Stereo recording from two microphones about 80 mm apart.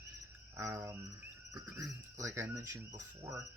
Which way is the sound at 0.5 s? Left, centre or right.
Right.